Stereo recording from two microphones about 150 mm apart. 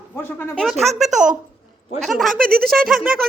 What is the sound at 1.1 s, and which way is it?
Speech, 60° right (ahead or behind).